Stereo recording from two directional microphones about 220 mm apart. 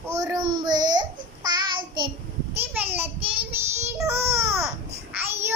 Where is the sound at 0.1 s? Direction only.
15° right (ahead or behind).